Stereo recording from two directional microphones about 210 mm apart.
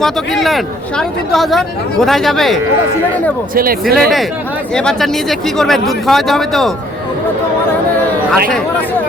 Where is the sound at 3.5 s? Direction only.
45° right (ahead or behind).